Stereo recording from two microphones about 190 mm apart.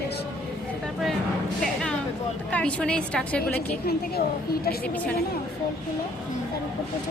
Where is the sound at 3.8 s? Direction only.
55° left (ahead or behind).